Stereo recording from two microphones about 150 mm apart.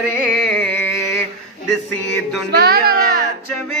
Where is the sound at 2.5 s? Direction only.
90° right.